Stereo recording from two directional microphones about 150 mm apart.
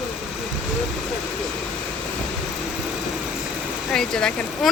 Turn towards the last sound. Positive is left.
turn(degrees=5)  # may be behind; listen again after turning